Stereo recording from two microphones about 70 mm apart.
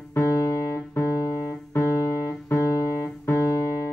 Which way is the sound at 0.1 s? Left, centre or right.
Left.